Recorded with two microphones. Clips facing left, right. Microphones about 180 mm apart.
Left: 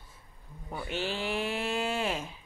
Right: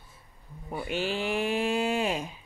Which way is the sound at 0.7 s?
15° right (ahead or behind).